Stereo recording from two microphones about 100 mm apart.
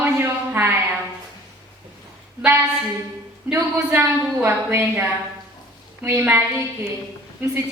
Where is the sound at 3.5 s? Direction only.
15° right (ahead or behind).